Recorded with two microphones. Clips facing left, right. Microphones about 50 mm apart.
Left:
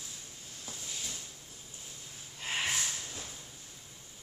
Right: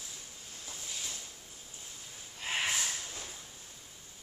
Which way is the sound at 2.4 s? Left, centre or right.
Centre.